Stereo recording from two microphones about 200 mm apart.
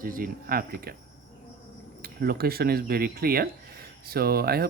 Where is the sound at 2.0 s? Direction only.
50° right (ahead or behind).